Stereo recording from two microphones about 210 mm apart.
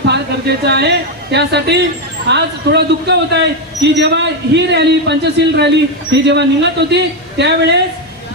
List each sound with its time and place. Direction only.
0.1 s a woman's voice: 55° right (ahead or behind)